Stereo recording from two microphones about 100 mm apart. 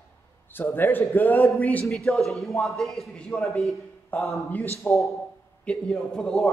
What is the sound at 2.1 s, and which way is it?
A man's voice, centre (ahead or behind).